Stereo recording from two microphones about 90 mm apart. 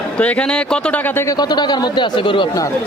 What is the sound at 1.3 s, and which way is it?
A man's voice, 50° left (ahead or behind).